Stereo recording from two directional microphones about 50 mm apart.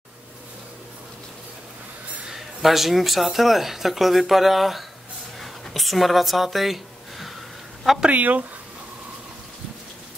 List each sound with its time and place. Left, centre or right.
2.2 s speech: centre
5.4 s a sound: centre
8.1 s speech: right